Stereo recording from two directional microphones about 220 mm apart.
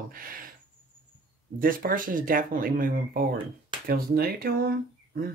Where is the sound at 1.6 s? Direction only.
40° right (ahead or behind).